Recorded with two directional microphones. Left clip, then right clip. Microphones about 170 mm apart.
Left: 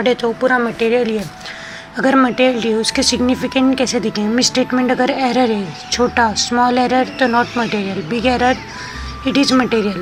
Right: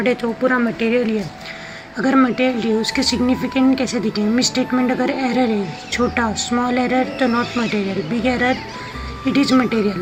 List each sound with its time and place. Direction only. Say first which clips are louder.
0.0 s a woman's voice: left 3 dB; 25° left (ahead or behind)